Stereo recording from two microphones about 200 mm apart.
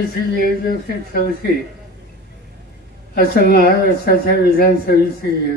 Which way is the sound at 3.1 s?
50° left (ahead or behind).